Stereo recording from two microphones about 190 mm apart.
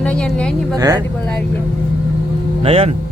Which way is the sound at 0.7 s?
15° right (ahead or behind).